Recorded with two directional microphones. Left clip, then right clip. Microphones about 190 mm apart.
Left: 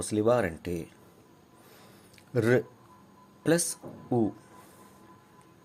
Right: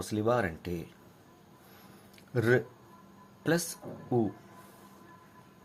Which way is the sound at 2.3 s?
25° left (ahead or behind).